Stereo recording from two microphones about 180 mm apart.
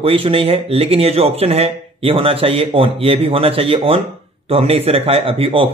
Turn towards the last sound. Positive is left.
turn(degrees=-30)  # may be behind; listen again after turning